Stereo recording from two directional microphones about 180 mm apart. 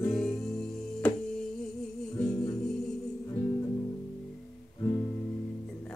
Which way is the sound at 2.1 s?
20° left (ahead or behind).